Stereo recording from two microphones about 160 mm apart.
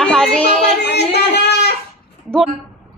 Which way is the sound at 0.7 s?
90° left.